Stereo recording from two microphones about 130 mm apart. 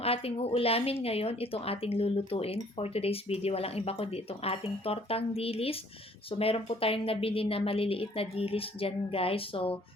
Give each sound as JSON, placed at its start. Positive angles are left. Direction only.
{"t": 0.0, "sound": "speech", "side_deg": 50}